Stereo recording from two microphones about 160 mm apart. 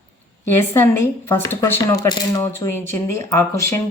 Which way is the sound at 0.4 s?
15° left (ahead or behind).